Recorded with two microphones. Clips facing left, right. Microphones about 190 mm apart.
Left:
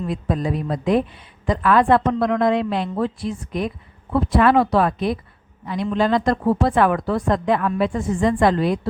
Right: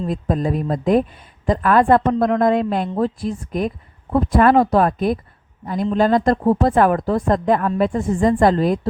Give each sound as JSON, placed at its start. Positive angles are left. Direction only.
{"t": 0.1, "sound": "a woman's voice", "side_deg": -45}